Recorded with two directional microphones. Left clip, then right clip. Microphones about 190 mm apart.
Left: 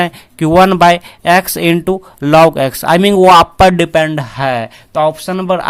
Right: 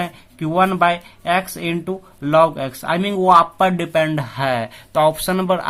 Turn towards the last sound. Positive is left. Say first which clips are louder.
# left 4 dB
turn(degrees=20)  # may be behind; listen again after turning